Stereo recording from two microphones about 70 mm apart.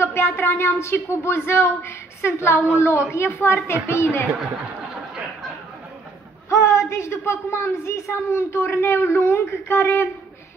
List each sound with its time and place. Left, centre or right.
0.0 s a woman's voice: left
6.5 s a woman's voice: left